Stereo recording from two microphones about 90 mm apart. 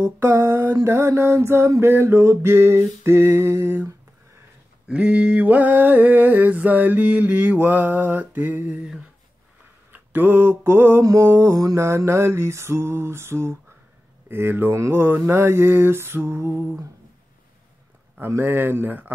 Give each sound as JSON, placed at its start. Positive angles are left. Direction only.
{"t": 0.0, "sound": "mantra", "side_deg": -25}
{"t": 4.8, "sound": "mantra", "side_deg": -10}
{"t": 9.9, "sound": "mantra", "side_deg": -20}
{"t": 18.2, "sound": "mantra", "side_deg": -25}